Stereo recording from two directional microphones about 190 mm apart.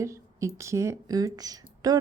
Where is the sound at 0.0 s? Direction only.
15° right (ahead or behind).